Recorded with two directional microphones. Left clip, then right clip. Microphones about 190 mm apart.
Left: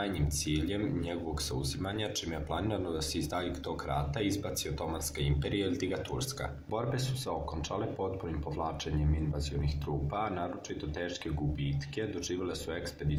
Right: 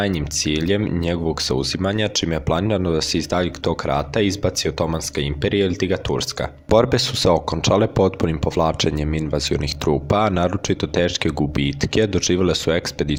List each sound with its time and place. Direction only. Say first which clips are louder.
0.0 s speech: right 13 dB; 45° right (ahead or behind)